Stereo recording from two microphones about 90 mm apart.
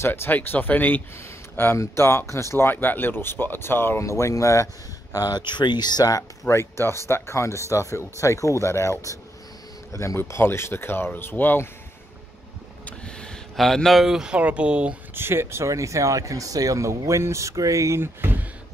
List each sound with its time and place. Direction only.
0.0 s speech: 25° left (ahead or behind); by 5.4 s 40° left (ahead or behind)
5.5 s speech: 55° left (ahead or behind)
6.4 s speech: 30° left (ahead or behind)
12.8 s speech: 10° left (ahead or behind); by 15.0 s 15° right (ahead or behind)
15.1 s speech: 25° right (ahead or behind)